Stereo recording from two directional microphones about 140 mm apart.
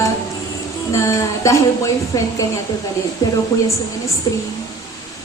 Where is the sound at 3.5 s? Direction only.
25° left (ahead or behind).